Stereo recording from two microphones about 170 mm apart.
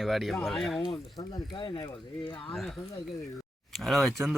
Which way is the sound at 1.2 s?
25° left (ahead or behind).